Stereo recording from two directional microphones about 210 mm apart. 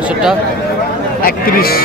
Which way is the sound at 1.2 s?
45° left (ahead or behind).